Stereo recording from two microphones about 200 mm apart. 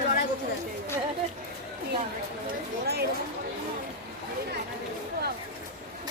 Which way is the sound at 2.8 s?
55° right (ahead or behind).